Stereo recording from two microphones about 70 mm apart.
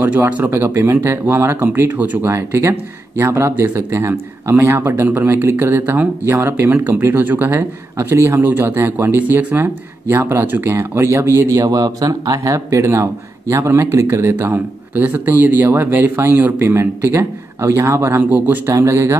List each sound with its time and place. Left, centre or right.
0.3 s a man's voice: right
2.2 s a man's voice: right
6.9 s a man's voice: right
7.2 s speech: right
8.0 s a man's voice: right
14.5 s a man's voice: right
18.3 s speech: right
18.7 s speech: right